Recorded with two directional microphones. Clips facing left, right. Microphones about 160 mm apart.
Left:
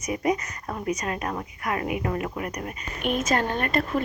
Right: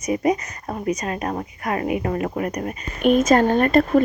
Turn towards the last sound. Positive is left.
turn(degrees=-40)  # may be behind; listen again after turning